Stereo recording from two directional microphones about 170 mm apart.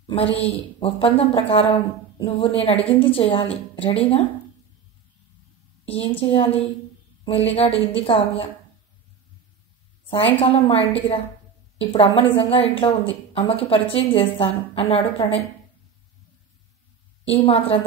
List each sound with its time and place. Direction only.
0.0 s speech: 35° left (ahead or behind)
5.9 s speech: 35° left (ahead or behind)
10.1 s speech: 35° left (ahead or behind)
17.2 s a woman's voice: 35° left (ahead or behind)